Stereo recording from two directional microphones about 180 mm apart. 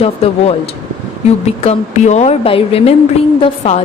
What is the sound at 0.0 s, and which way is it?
A woman's voice, 35° left (ahead or behind).